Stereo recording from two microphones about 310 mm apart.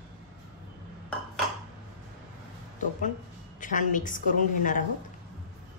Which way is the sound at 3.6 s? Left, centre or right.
Left.